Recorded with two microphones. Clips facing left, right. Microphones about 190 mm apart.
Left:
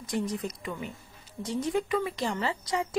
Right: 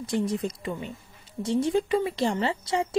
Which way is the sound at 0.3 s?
30° right (ahead or behind).